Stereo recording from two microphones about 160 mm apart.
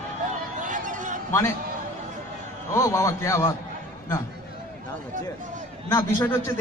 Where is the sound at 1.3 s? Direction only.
15° left (ahead or behind).